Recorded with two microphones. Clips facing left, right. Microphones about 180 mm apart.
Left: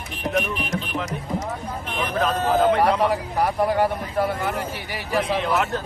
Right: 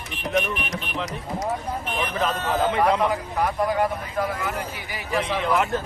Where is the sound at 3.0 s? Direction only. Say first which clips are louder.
Left 2 dB; 30° left (ahead or behind).